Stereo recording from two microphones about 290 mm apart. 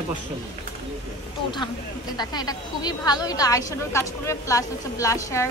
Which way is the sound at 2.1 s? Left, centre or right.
Centre.